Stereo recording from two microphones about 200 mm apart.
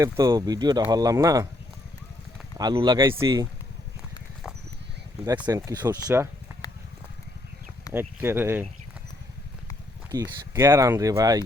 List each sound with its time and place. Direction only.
0.0 s speech: 15° right (ahead or behind)
2.6 s speech: 20° right (ahead or behind)
5.2 s speech: 15° right (ahead or behind)
6.5 s a sound: 10° right (ahead or behind)
7.9 s speech: 10° right (ahead or behind)
10.1 s speech: 20° right (ahead or behind)